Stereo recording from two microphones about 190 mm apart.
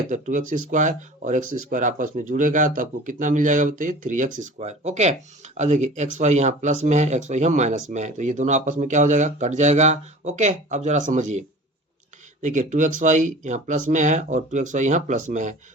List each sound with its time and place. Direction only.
0.1 s speech: 40° right (ahead or behind)